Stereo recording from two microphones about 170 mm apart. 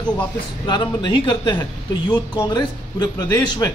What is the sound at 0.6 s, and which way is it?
Speech, 25° left (ahead or behind).